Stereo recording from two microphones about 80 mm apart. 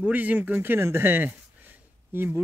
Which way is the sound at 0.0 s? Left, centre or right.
Centre.